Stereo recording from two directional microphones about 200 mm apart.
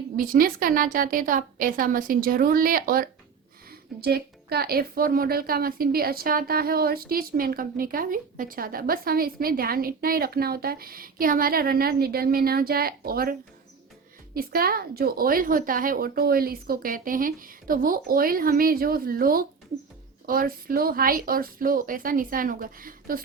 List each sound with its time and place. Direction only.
0.2 s a woman's voice: 45° right (ahead or behind)
14.3 s a woman's voice: 45° right (ahead or behind)